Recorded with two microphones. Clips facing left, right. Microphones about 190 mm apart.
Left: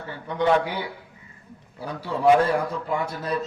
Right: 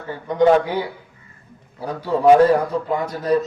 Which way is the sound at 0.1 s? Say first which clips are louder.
Right 7 dB; 40° right (ahead or behind).